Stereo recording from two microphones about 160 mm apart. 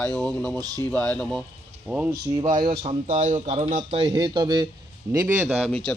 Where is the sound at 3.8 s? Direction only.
35° right (ahead or behind).